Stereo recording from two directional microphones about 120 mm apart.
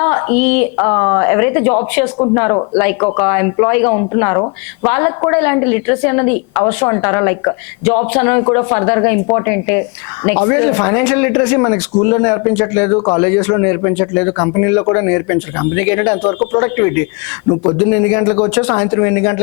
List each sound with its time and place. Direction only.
0.0 s speech: 20° left (ahead or behind)